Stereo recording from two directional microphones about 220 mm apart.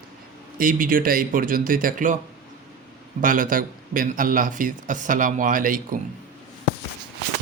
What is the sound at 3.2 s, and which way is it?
Speech, 40° right (ahead or behind).